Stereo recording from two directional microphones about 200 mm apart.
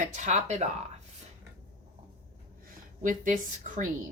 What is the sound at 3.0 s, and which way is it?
Speech, 40° right (ahead or behind).